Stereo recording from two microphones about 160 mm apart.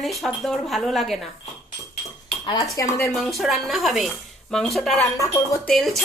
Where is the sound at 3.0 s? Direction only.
Centre (ahead or behind).